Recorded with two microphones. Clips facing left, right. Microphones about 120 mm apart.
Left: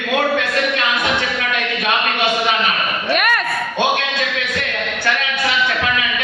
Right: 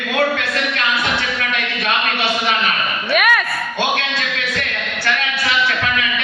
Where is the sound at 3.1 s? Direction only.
5° right (ahead or behind).